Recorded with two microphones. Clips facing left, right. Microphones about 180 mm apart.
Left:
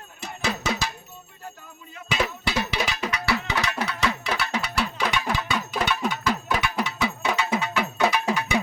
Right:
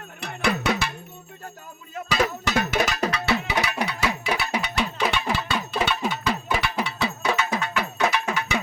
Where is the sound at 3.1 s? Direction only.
25° right (ahead or behind).